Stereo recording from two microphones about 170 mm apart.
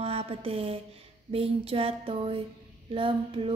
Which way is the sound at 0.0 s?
35° right (ahead or behind).